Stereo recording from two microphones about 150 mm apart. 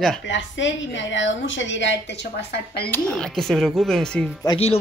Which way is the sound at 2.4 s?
90° left.